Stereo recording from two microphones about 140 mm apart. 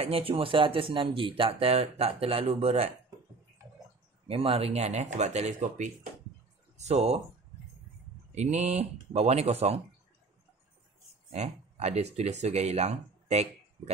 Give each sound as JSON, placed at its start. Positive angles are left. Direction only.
{"t": 0.0, "sound": "speech", "side_deg": -45}
{"t": 4.3, "sound": "speech", "side_deg": -40}
{"t": 8.4, "sound": "speech", "side_deg": -50}
{"t": 11.3, "sound": "speech", "side_deg": -50}